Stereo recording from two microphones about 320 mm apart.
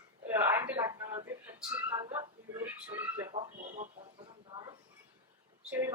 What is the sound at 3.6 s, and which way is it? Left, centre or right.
Speech, right.